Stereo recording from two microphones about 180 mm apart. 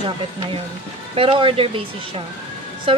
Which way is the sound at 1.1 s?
30° right (ahead or behind).